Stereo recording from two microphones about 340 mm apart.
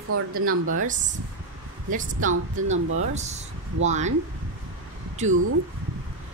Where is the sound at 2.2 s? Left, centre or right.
Right.